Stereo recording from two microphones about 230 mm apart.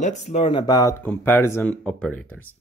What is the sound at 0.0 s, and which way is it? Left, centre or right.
Speech, left.